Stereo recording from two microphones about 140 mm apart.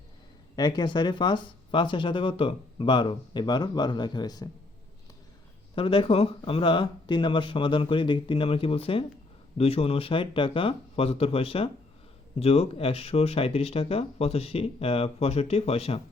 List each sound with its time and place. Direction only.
0.5 s speech: 30° left (ahead or behind)
5.7 s speech: 40° left (ahead or behind)